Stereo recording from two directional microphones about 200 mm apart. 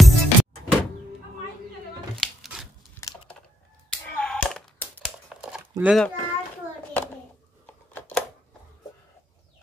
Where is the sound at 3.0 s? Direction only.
10° left (ahead or behind).